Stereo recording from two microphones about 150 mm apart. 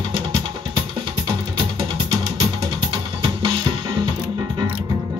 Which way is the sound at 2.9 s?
30° right (ahead or behind).